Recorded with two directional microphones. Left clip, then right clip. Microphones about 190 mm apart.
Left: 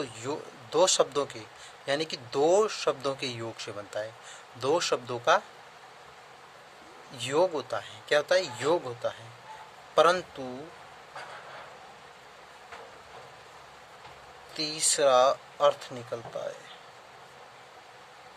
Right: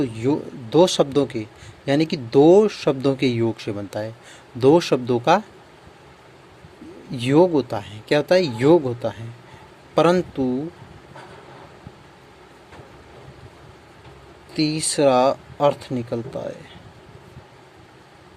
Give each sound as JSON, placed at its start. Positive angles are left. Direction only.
{"t": 0.0, "sound": "speech", "side_deg": -15}
{"t": 7.1, "sound": "speech", "side_deg": -20}
{"t": 14.5, "sound": "speech", "side_deg": -20}